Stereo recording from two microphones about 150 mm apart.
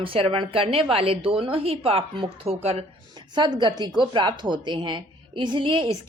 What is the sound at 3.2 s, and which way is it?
A woman's voice, 30° right (ahead or behind).